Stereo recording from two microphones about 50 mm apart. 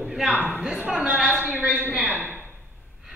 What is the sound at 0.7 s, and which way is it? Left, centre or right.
A woman's voice, right.